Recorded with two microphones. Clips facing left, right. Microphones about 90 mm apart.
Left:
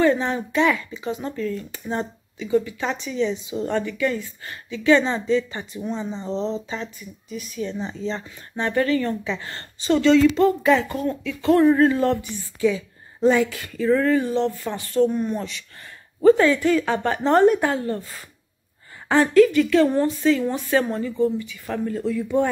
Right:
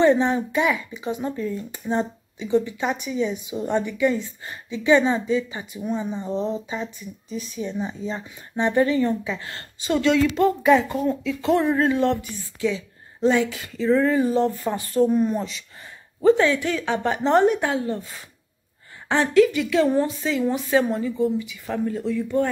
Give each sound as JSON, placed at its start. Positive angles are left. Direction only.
{"t": 0.0, "sound": "speech", "side_deg": -20}
{"t": 7.2, "sound": "speech", "side_deg": -25}
{"t": 7.7, "sound": "speech", "side_deg": -10}
{"t": 9.2, "sound": "a woman's voice", "side_deg": -5}
{"t": 14.1, "sound": "speech", "side_deg": -25}
{"t": 14.7, "sound": "speech", "side_deg": -10}